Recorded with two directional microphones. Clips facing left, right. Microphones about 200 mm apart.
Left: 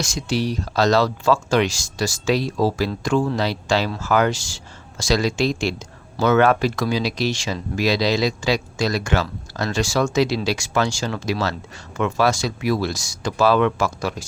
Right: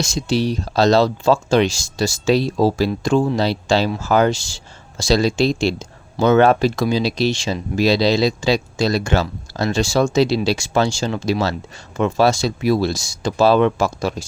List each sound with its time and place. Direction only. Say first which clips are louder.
0.0 s speech: right 4 dB; 25° right (ahead or behind)